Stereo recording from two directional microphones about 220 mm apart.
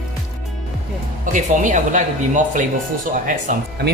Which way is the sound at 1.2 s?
35° right (ahead or behind).